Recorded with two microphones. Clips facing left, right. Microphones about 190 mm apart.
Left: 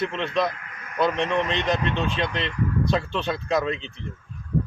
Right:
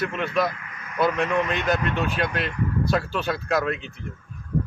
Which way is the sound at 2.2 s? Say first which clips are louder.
Even; 5° right (ahead or behind).